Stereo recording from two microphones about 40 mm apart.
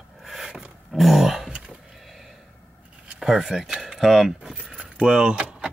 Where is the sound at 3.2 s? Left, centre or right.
Centre.